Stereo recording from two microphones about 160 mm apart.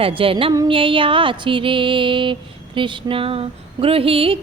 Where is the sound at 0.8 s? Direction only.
35° right (ahead or behind).